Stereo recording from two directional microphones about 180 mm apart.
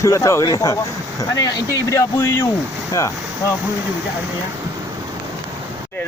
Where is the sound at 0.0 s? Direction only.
15° left (ahead or behind).